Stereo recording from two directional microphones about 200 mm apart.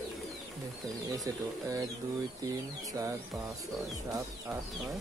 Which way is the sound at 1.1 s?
15° right (ahead or behind).